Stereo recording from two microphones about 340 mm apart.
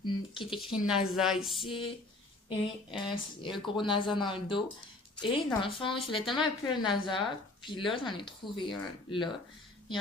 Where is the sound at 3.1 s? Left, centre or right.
Centre.